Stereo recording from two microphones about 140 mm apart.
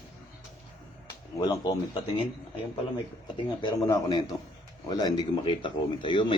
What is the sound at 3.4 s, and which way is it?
Speech, 30° left (ahead or behind).